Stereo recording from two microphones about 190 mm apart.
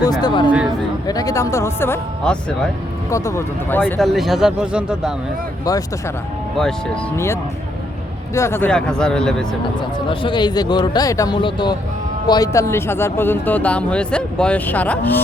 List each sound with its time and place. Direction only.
0.2 s speech: 25° left (ahead or behind)
4.1 s speech: centre (ahead or behind)
6.6 s speech: 5° left (ahead or behind)
8.4 s speech: 15° left (ahead or behind)
10.1 s speech: 25° left (ahead or behind); by 15.2 s 10° left (ahead or behind)